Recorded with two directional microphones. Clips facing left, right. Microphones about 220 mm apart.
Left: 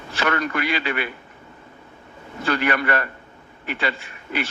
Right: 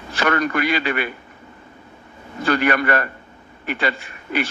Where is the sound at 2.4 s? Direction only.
45° right (ahead or behind).